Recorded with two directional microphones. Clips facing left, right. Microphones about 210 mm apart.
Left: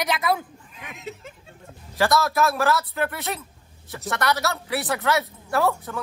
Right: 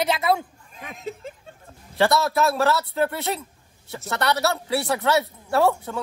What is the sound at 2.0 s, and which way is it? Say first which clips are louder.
A woman's voice: right 1 dB; 30° right (ahead or behind).